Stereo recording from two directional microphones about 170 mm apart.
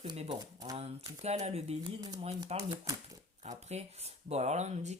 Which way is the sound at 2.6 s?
20° right (ahead or behind).